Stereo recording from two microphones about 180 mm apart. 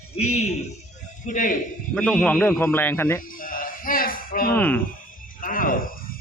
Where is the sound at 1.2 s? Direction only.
45° left (ahead or behind).